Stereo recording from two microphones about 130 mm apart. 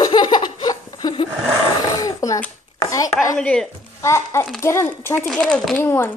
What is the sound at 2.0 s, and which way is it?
Speech, 25° left (ahead or behind).